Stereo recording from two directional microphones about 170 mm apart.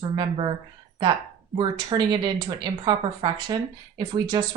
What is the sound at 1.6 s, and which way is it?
Speech, 25° right (ahead or behind).